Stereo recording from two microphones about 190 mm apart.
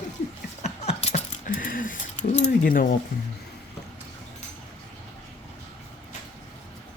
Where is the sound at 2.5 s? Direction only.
50° left (ahead or behind).